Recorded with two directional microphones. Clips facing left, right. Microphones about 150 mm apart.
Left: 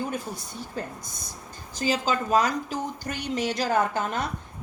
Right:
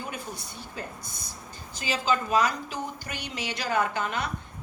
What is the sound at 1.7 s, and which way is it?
A woman's voice, 40° left (ahead or behind).